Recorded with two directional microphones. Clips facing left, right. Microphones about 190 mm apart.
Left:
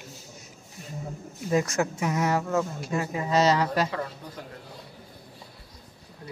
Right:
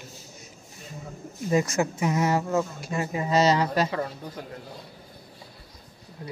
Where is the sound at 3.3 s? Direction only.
5° right (ahead or behind).